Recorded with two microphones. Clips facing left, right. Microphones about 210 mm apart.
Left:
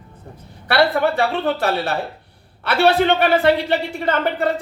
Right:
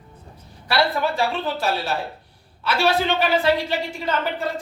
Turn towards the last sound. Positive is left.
turn(degrees=60)  # may be behind; listen again after turning